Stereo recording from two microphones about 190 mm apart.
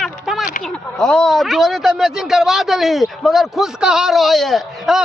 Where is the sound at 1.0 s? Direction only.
5° left (ahead or behind).